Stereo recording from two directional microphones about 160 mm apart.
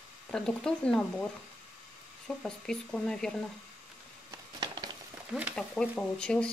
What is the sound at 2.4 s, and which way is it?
Speech, 5° left (ahead or behind).